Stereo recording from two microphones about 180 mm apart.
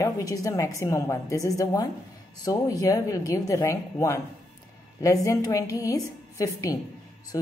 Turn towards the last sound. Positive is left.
turn(degrees=20)  # may be behind; listen again after turning